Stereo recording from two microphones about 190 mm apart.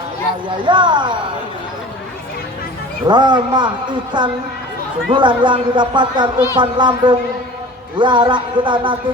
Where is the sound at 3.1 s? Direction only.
25° right (ahead or behind).